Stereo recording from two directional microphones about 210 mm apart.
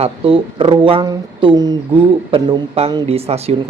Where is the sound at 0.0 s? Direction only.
25° right (ahead or behind).